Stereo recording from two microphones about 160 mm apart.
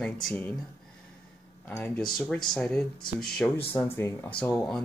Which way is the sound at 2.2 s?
5° left (ahead or behind).